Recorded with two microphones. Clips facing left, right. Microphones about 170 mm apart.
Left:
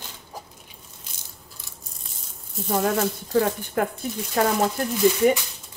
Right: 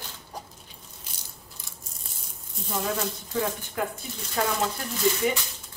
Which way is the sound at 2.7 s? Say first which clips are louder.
Left 7 dB; 55° left (ahead or behind).